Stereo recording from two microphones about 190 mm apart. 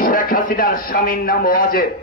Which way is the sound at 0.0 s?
45° left (ahead or behind).